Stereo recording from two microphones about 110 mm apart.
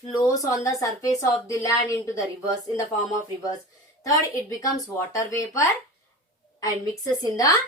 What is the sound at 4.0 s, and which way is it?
Speech, 30° left (ahead or behind).